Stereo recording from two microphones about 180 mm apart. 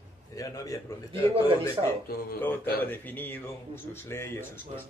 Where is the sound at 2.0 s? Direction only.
55° left (ahead or behind).